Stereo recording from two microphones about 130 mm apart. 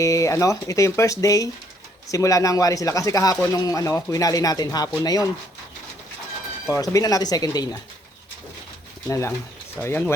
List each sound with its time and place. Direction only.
0.0 s speech: 25° left (ahead or behind)
6.7 s speech: 25° left (ahead or behind)
9.0 s speech: 25° left (ahead or behind)